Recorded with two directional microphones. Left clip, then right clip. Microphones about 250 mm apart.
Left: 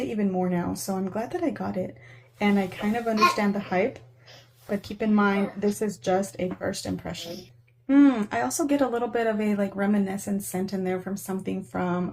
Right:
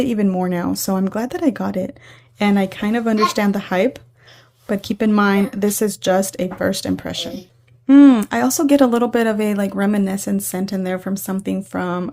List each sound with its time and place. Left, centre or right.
0.1 s speech: right